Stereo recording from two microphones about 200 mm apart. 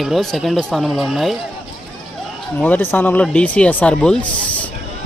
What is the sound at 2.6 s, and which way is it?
Speech, 10° left (ahead or behind).